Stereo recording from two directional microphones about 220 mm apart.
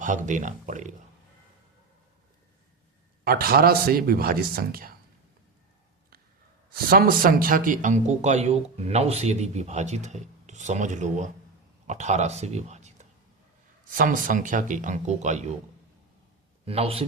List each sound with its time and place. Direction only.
0.0 s speech: 35° right (ahead or behind)
3.2 s a man's voice: 45° right (ahead or behind)
6.7 s speech: 40° right (ahead or behind)
16.6 s a man's voice: 25° right (ahead or behind)